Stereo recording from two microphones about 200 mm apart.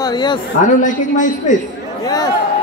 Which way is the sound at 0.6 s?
40° left (ahead or behind).